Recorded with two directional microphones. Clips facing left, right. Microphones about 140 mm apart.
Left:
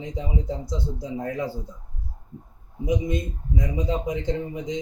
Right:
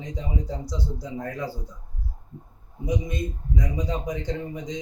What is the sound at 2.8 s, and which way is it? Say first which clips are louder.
A man's voice: left 3 dB; 20° left (ahead or behind).